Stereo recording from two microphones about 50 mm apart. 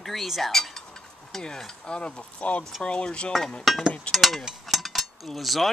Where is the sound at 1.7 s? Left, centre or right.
Left.